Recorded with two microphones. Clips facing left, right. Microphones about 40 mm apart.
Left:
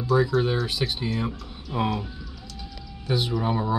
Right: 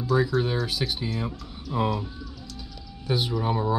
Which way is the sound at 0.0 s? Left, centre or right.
Centre.